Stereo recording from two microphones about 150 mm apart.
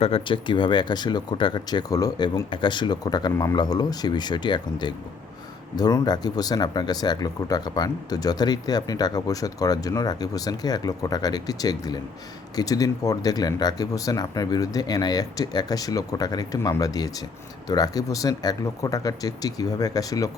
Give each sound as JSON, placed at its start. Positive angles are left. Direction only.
{"t": 0.0, "sound": "speech", "side_deg": 35}